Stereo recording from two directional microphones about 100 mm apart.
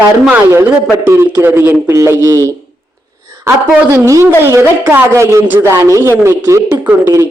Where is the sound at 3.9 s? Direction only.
30° right (ahead or behind).